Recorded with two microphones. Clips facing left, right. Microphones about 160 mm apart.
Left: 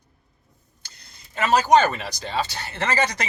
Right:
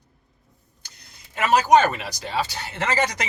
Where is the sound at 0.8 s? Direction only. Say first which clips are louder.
Even; 15° right (ahead or behind).